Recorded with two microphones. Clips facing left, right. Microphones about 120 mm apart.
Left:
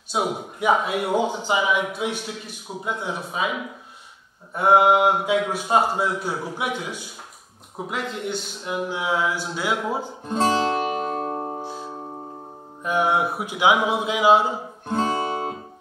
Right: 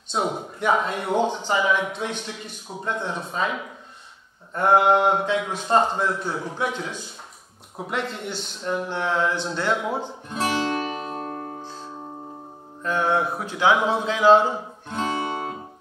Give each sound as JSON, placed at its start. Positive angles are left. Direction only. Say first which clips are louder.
{"t": 0.1, "sound": "a man's voice", "louder": "left 1 dB", "side_deg": 5}
{"t": 4.6, "sound": "a man's voice", "louder": "left 1 dB", "side_deg": 10}
{"t": 7.7, "sound": "a man's voice", "louder": "even", "side_deg": 0}
{"t": 10.2, "sound": "music", "louder": "left 5 dB", "side_deg": 30}
{"t": 10.8, "sound": "music", "louder": "left 4 dB", "side_deg": 40}
{"t": 11.6, "sound": "music", "louder": "left 5 dB", "side_deg": 15}
{"t": 12.8, "sound": "a man's voice", "louder": "left 1 dB", "side_deg": 15}
{"t": 14.9, "sound": "music", "louder": "left 3 dB", "side_deg": 35}